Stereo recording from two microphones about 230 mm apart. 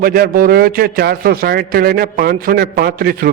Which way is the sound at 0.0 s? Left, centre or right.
Right.